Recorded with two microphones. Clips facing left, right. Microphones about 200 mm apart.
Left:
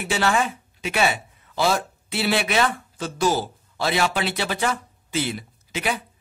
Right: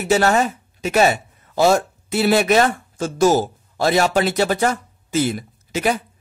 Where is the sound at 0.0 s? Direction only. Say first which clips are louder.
Right 6 dB; 40° right (ahead or behind).